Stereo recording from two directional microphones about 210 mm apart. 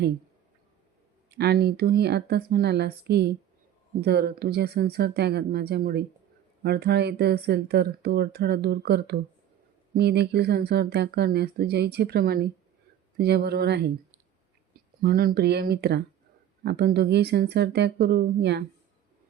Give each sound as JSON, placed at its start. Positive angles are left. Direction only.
{"t": 1.4, "sound": "speech", "side_deg": -50}
{"t": 15.0, "sound": "speech", "side_deg": -45}